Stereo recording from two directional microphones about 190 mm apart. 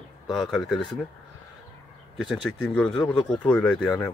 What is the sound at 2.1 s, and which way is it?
Speech, 5° left (ahead or behind).